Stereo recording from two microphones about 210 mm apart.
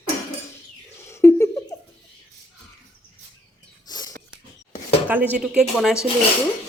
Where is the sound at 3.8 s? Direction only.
20° left (ahead or behind).